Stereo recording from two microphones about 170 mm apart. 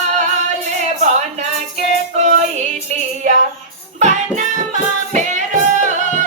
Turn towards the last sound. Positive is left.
turn(degrees=-45)  # may be behind; listen again after turning